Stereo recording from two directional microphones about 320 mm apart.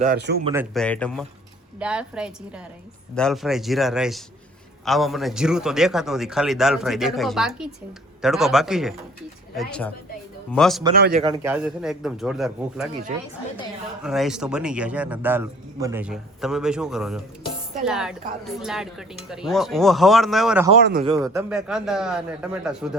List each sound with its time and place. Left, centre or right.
0.0 s speech: right
0.4 s a man's voice: centre
10.9 s speech: right
11.2 s a man's voice: centre
14.0 s a man's voice: centre
21.0 s a man's voice: centre